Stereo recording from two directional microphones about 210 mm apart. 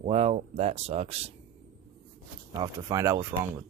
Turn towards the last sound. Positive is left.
turn(degrees=-15)  # may be behind; listen again after turning